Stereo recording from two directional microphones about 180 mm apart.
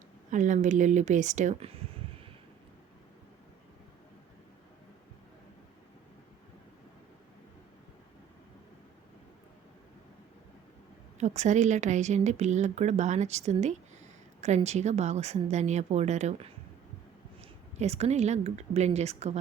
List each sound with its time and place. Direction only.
0.3 s speech: 45° right (ahead or behind)
11.2 s a woman's voice: 40° right (ahead or behind)
17.7 s a woman's voice: 35° right (ahead or behind)